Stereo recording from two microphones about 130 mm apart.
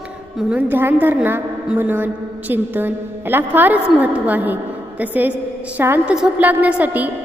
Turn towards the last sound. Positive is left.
turn(degrees=-15)  # may be behind; listen again after turning